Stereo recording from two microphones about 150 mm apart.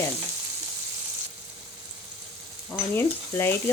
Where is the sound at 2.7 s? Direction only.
15° left (ahead or behind).